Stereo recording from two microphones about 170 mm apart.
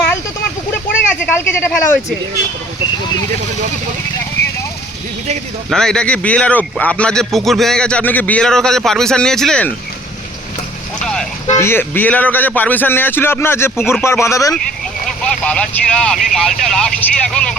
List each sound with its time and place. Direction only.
1.0 s speech: 15° left (ahead or behind)
5.7 s a man's voice: 5° left (ahead or behind)
11.0 s a man's voice: 5° left (ahead or behind)
11.5 s a man's voice: 15° left (ahead or behind)
15.0 s a man's voice: 5° left (ahead or behind)